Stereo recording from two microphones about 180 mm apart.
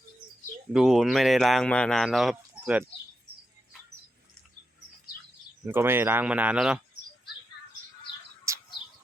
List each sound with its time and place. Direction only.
0.7 s speech: 5° right (ahead or behind)
5.6 s speech: 10° right (ahead or behind)
8.5 s bird: 15° right (ahead or behind)